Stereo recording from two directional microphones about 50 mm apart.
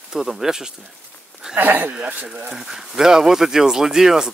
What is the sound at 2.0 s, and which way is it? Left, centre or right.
Speech, right.